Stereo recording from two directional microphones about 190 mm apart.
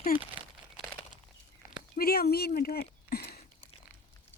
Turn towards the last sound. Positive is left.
turn(degrees=55)  # may be behind; listen again after turning